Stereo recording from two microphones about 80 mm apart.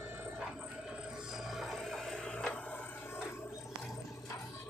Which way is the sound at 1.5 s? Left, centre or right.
Centre.